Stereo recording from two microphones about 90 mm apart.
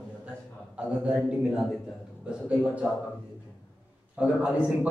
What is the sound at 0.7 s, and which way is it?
A man's voice, 10° right (ahead or behind).